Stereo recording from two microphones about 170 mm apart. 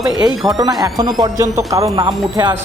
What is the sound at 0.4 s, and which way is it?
Speech, 20° right (ahead or behind).